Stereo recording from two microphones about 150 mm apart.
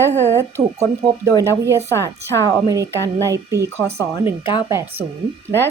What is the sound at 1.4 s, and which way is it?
Speech, 15° right (ahead or behind).